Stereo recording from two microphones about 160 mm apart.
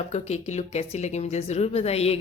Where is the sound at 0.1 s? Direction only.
45° left (ahead or behind).